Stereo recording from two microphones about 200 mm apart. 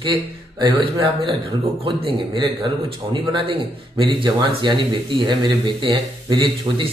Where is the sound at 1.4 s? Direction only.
25° right (ahead or behind).